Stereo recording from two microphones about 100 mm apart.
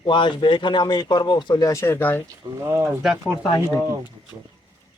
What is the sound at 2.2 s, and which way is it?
Speech, 25° right (ahead or behind).